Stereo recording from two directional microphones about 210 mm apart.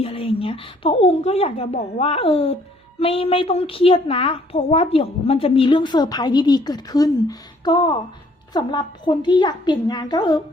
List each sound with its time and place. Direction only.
0.0 s a woman's voice: 25° left (ahead or behind)